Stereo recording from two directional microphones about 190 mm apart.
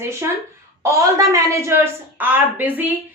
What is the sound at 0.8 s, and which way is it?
A woman's voice, 15° right (ahead or behind).